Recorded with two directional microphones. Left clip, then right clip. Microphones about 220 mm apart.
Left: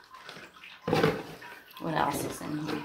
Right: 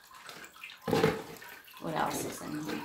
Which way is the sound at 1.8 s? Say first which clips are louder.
Left 3 dB; 40° left (ahead or behind).